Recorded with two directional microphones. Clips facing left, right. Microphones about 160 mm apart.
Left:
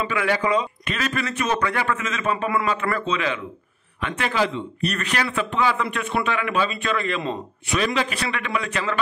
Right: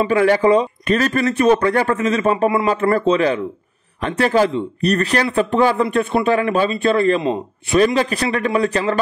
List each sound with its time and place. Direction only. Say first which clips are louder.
0.0 s a man's voice: right 9 dB; 40° right (ahead or behind)